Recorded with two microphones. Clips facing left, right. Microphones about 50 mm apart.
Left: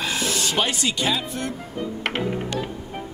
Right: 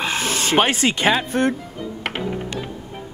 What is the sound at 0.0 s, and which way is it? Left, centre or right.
Speech, right.